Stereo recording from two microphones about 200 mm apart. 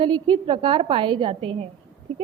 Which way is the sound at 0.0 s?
25° right (ahead or behind).